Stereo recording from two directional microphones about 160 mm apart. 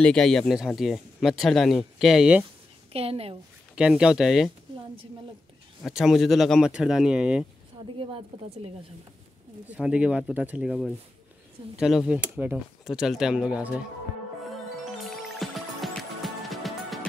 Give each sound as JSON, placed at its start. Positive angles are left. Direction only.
{"t": 0.0, "sound": "speech", "side_deg": 5}
{"t": 2.9, "sound": "a woman's voice", "side_deg": -40}
{"t": 3.7, "sound": "speech", "side_deg": -5}
{"t": 5.9, "sound": "speech", "side_deg": 0}
{"t": 8.0, "sound": "a woman's voice", "side_deg": -35}
{"t": 9.7, "sound": "speech", "side_deg": -5}
{"t": 14.9, "sound": "music", "side_deg": 0}